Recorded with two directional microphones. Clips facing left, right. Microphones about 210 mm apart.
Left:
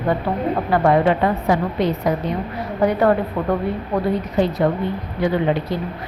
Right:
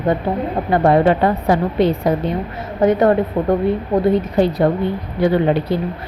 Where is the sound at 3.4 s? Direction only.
25° right (ahead or behind).